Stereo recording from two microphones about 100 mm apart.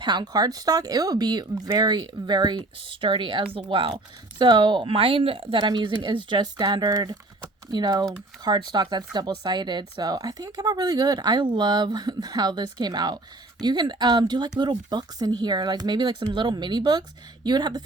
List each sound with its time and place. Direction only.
0.0 s speech: 50° right (ahead or behind)